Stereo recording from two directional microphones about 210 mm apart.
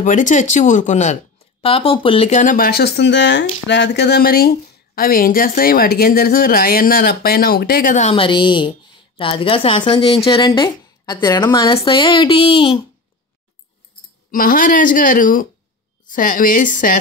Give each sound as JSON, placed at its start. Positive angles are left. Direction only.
{"t": 0.0, "sound": "speech", "side_deg": 35}
{"t": 14.3, "sound": "speech", "side_deg": 40}